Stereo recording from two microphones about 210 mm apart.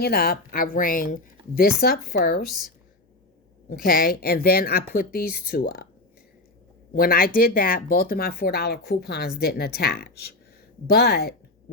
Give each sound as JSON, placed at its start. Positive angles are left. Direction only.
{"t": 0.0, "sound": "speech", "side_deg": 45}
{"t": 2.5, "sound": "a woman's voice", "side_deg": 0}
{"t": 3.8, "sound": "speech", "side_deg": 45}
{"t": 6.9, "sound": "speech", "side_deg": 45}